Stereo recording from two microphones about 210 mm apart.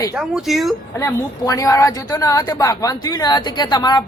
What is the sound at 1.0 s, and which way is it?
Speech, 15° left (ahead or behind).